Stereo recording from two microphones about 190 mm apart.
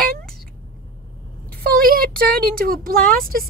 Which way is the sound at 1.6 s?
50° right (ahead or behind).